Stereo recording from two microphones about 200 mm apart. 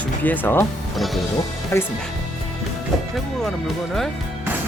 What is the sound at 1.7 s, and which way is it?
Speech, 10° left (ahead or behind).